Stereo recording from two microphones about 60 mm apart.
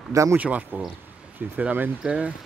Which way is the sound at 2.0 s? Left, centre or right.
Centre.